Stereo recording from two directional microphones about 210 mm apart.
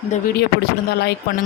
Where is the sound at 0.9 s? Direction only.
50° left (ahead or behind).